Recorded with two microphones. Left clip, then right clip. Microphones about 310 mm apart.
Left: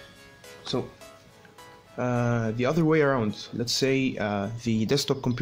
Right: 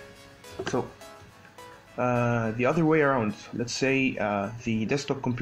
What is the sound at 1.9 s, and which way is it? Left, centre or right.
Speech, left.